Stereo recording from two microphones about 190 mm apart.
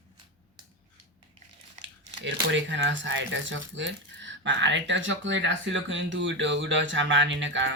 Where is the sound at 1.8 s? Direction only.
75° right (ahead or behind).